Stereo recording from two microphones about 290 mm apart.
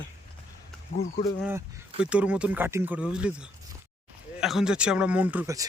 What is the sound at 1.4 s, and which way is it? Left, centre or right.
Speech, centre.